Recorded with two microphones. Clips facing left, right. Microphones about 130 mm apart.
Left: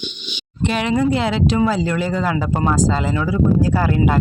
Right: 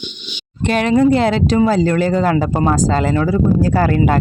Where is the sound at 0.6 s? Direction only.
45° right (ahead or behind).